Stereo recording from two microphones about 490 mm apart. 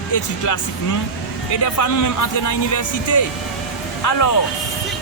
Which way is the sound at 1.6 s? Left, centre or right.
Left.